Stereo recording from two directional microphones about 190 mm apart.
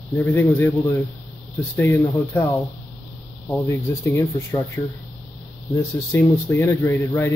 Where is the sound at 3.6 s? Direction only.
15° left (ahead or behind).